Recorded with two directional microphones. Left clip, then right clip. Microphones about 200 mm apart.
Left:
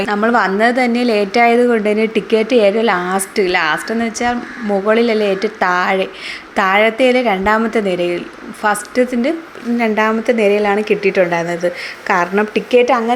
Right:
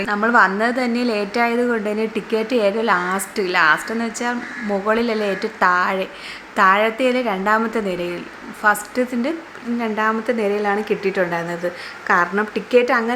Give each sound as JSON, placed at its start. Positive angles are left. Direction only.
{"t": 0.0, "sound": "a woman's voice", "side_deg": 15}